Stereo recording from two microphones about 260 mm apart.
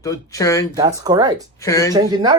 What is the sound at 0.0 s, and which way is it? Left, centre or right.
Speech, centre.